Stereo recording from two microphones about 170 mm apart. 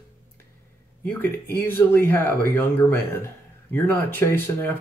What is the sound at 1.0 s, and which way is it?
A man's voice, 10° left (ahead or behind).